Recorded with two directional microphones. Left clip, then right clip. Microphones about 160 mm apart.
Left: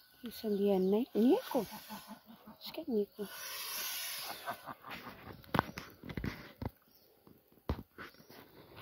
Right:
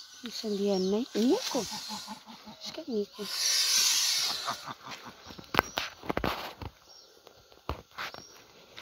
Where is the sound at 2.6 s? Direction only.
20° left (ahead or behind).